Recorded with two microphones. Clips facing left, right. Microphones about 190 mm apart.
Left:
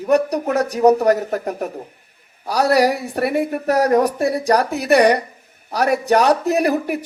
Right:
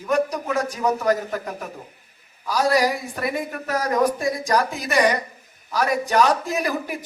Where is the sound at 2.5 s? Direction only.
70° left (ahead or behind).